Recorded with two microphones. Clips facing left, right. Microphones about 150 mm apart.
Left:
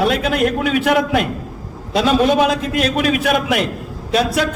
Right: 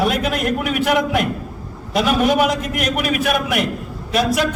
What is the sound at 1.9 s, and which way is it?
Speech, 25° left (ahead or behind).